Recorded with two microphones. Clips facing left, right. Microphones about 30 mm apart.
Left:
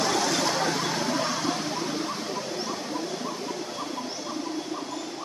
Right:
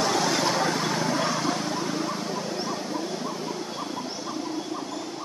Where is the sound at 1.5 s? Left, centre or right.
Centre.